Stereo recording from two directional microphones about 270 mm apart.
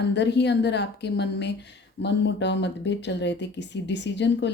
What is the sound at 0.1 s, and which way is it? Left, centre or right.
A woman's voice, left.